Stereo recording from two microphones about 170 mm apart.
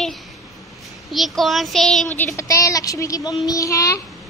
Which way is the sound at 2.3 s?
20° left (ahead or behind).